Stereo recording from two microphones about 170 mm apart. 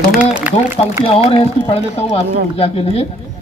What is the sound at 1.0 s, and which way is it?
A man's voice, 35° left (ahead or behind).